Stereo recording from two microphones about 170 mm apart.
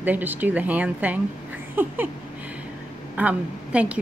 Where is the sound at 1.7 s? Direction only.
10° right (ahead or behind).